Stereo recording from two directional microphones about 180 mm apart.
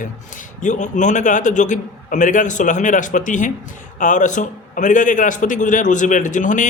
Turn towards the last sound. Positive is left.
turn(degrees=45)  # may be behind; listen again after turning